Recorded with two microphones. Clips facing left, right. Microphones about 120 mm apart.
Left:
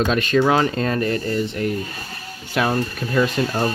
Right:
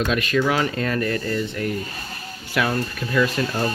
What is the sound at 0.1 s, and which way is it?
Speech, 30° left (ahead or behind).